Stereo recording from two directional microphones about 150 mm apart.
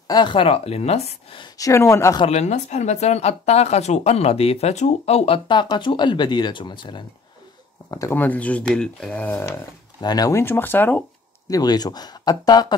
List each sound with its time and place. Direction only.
0.1 s speech: 30° left (ahead or behind)
1.4 s speech: 20° left (ahead or behind)
2.2 s speech: 50° left (ahead or behind); by 7.1 s 30° left (ahead or behind)
7.9 s speech: 20° left (ahead or behind)
9.9 s speech: 25° left (ahead or behind)
11.4 s speech: 25° left (ahead or behind)